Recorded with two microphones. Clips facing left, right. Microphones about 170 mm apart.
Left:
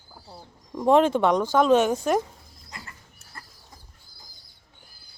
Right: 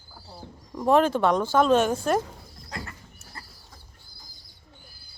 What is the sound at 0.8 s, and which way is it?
Speech, 20° left (ahead or behind).